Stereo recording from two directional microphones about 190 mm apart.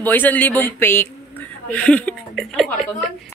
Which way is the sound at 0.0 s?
10° left (ahead or behind).